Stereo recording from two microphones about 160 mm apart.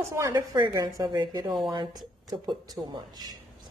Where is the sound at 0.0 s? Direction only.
15° right (ahead or behind).